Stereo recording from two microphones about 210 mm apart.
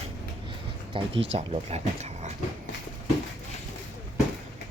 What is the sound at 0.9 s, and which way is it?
Speech, 25° right (ahead or behind).